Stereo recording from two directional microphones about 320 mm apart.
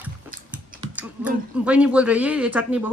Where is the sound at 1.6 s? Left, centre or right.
Centre.